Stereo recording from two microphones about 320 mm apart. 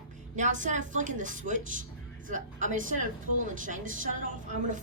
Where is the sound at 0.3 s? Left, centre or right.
Right.